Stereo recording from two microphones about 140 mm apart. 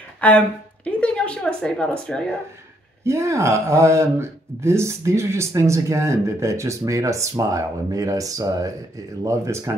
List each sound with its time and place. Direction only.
0.2 s a woman's voice: 10° left (ahead or behind)
3.0 s speech: 20° right (ahead or behind)